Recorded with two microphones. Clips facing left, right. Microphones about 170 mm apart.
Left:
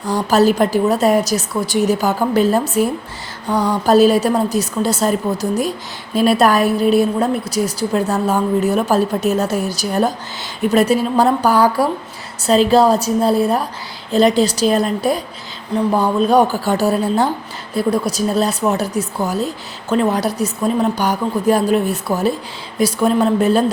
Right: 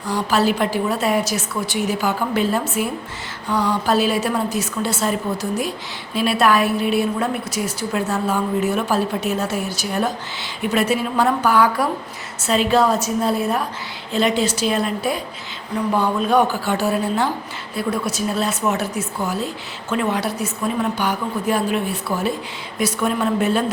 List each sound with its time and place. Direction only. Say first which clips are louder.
0.1 s a woman's voice: left 5 dB; 40° left (ahead or behind)